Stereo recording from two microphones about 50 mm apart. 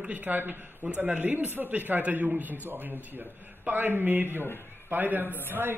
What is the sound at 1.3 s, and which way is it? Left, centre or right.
A man's voice, right.